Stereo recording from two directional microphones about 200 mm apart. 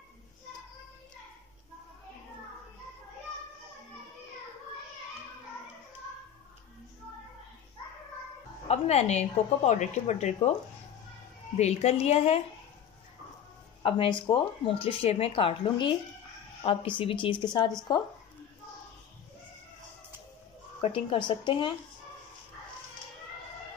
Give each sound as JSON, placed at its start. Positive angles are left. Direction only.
{"t": 8.6, "sound": "speech", "side_deg": 30}
{"t": 11.5, "sound": "speech", "side_deg": 35}
{"t": 13.8, "sound": "speech", "side_deg": 25}
{"t": 20.8, "sound": "speech", "side_deg": 25}